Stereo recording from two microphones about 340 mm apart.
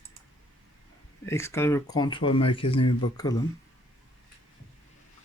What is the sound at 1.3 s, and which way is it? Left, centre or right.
Speech, centre.